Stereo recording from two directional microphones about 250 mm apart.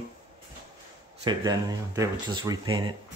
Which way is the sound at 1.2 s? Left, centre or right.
Centre.